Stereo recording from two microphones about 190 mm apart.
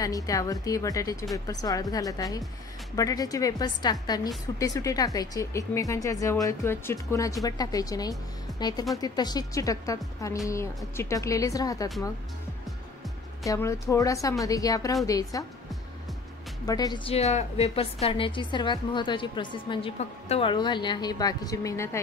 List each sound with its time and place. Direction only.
0.0 s a woman's voice: 20° left (ahead or behind)
13.5 s speech: 15° left (ahead or behind)
16.6 s a woman's voice: 20° left (ahead or behind)